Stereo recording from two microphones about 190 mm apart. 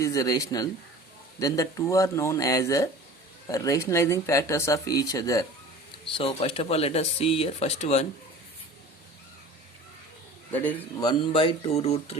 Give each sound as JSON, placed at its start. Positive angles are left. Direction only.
{"t": 0.0, "sound": "speech", "side_deg": 15}
{"t": 6.1, "sound": "speech", "side_deg": 30}
{"t": 10.5, "sound": "speech", "side_deg": 10}
{"t": 11.0, "sound": "speech", "side_deg": 25}